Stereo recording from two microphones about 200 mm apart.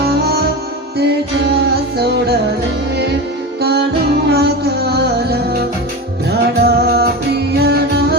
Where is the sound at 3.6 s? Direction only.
55° right (ahead or behind).